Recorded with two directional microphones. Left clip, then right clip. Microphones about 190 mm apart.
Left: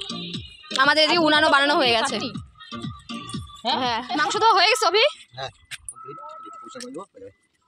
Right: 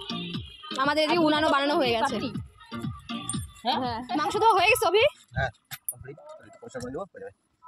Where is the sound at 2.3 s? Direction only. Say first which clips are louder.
Left 3 dB; centre (ahead or behind).